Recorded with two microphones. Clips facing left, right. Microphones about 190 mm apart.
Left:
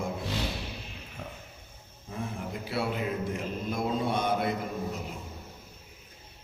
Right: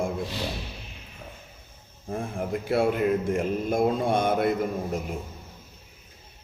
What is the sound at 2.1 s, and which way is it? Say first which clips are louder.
Mantra: right 7 dB; 50° right (ahead or behind).